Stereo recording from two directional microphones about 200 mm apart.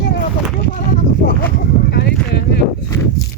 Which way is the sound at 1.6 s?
55° left (ahead or behind).